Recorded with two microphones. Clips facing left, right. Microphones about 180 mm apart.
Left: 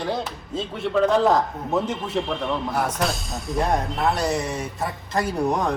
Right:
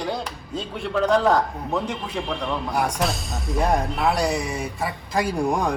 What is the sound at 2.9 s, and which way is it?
Speech, centre (ahead or behind).